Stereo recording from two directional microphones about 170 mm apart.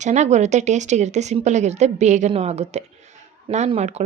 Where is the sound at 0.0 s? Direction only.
45° right (ahead or behind).